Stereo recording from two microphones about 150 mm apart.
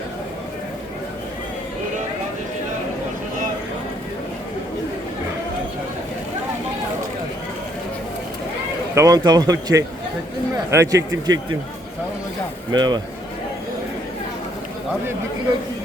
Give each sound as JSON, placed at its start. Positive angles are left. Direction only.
{"t": 9.0, "sound": "speech", "side_deg": -25}
{"t": 12.7, "sound": "speech", "side_deg": -30}